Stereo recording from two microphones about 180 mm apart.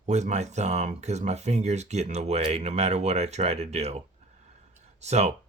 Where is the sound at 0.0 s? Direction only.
40° right (ahead or behind).